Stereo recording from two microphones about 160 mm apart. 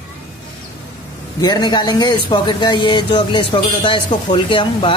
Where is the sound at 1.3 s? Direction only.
25° left (ahead or behind).